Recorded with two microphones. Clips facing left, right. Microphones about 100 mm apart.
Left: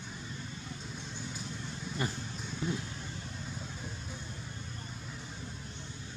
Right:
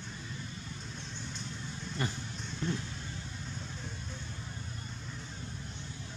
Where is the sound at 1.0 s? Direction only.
5° left (ahead or behind).